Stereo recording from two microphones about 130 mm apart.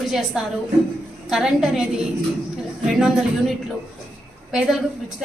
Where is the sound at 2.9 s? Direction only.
Centre (ahead or behind).